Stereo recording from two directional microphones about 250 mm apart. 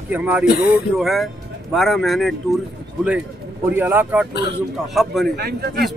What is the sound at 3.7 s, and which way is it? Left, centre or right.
Speech, centre.